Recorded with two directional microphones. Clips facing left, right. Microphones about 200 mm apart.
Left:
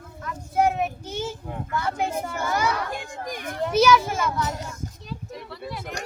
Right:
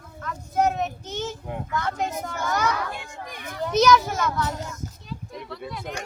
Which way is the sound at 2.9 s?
45° left (ahead or behind).